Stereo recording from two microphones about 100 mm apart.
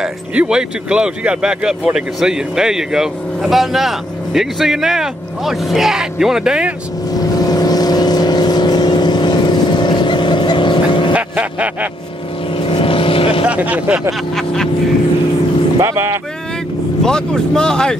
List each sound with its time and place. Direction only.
0.0 s speech: 10° right (ahead or behind)
7.2 s vehicle: 40° left (ahead or behind); by 11.1 s 55° left (ahead or behind)
11.1 s vehicle: 15° right (ahead or behind)
12.5 s vehicle: 65° left (ahead or behind)
13.5 s speech: 15° right (ahead or behind)
14.3 s speech: 5° left (ahead or behind)
15.8 s speech: 30° right (ahead or behind)
17.0 s speech: 5° left (ahead or behind)